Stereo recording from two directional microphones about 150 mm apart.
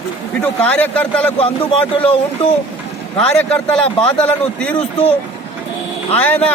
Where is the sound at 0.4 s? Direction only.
10° left (ahead or behind).